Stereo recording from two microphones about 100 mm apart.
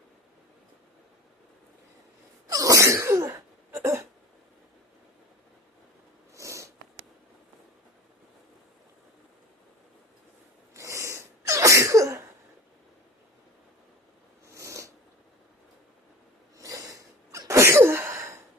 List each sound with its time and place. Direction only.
2.5 s sneeze: 35° right (ahead or behind)
6.3 s sniff: 30° right (ahead or behind)
10.8 s sneeze: 30° right (ahead or behind)
14.5 s a sound: 30° right (ahead or behind)
16.6 s sneeze: 35° right (ahead or behind)